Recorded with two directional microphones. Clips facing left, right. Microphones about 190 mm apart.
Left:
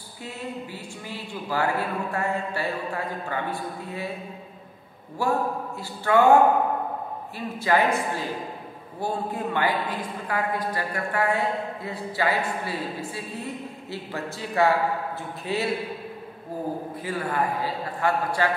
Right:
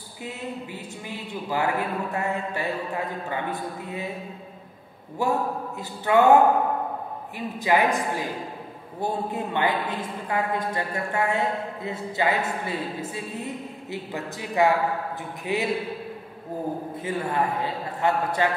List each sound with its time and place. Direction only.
1.0 s a man's voice: 20° right (ahead or behind)
5.2 s a man's voice: 20° right (ahead or behind)
7.3 s a man's voice: 15° right (ahead or behind)
17.0 s a man's voice: 25° right (ahead or behind)